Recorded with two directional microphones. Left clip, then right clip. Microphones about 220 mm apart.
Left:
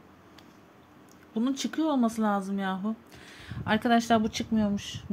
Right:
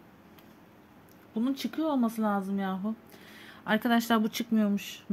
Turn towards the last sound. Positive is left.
turn(degrees=-10)  # may be behind; listen again after turning